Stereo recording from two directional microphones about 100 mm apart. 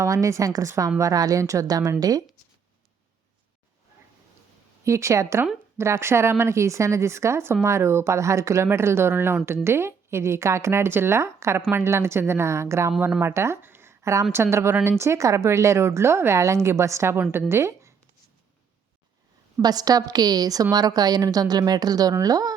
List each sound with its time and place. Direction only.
0.0 s a woman's voice: 30° right (ahead or behind)
4.8 s speech: 30° right (ahead or behind)
19.5 s a woman's voice: 40° right (ahead or behind)